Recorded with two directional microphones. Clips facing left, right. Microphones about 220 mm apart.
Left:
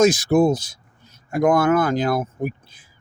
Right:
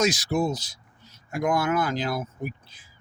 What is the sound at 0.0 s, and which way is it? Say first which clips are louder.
Speech: left 8 dB; 50° left (ahead or behind).